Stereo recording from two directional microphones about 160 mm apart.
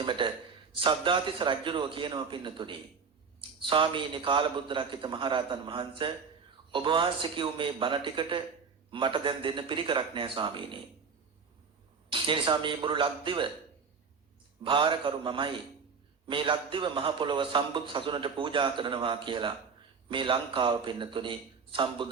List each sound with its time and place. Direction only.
0.0 s a man's voice: 30° right (ahead or behind)
12.1 s a man's voice: 30° right (ahead or behind)
14.6 s a man's voice: 30° right (ahead or behind)